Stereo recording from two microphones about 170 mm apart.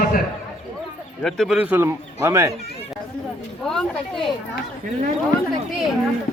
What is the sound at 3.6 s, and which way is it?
Speech, 5° left (ahead or behind).